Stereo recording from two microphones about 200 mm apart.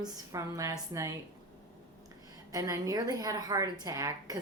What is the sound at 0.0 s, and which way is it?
A woman's voice, 15° right (ahead or behind).